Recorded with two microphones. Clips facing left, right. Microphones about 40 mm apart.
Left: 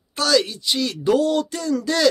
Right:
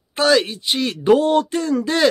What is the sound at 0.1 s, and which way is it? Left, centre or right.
Speech, right.